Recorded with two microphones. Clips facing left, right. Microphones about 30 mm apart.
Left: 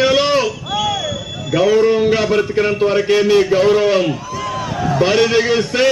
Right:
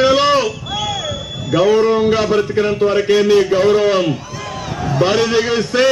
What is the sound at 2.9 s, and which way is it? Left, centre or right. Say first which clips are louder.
A man's voice: right 1 dB; centre.